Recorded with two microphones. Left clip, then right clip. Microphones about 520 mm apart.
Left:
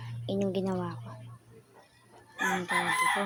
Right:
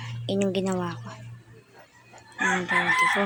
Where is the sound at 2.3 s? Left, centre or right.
Left.